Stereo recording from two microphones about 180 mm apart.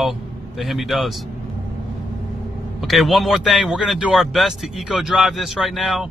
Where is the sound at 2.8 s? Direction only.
Centre (ahead or behind).